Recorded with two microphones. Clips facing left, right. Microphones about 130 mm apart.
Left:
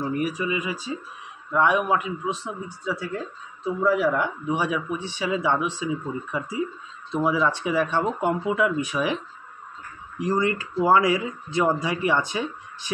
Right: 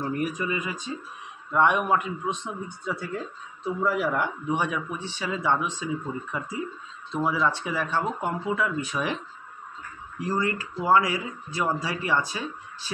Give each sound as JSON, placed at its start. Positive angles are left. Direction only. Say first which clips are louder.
{"t": 0.0, "sound": "a man's voice", "louder": "left 2 dB", "side_deg": 5}
{"t": 10.2, "sound": "speech", "louder": "left 4 dB", "side_deg": 20}